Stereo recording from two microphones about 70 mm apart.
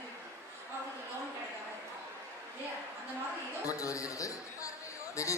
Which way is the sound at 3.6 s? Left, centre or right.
Left.